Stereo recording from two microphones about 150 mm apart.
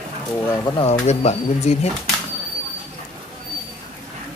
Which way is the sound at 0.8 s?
45° left (ahead or behind).